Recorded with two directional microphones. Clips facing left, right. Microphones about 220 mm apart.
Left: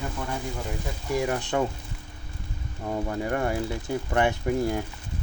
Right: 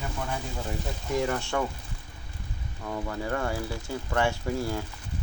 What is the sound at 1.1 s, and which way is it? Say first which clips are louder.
Speech: left 1 dB; 15° left (ahead or behind).